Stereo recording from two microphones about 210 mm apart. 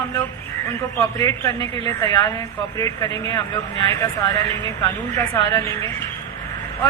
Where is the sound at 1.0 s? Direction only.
15° left (ahead or behind).